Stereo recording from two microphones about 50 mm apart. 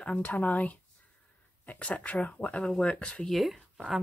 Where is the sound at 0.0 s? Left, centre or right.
Left.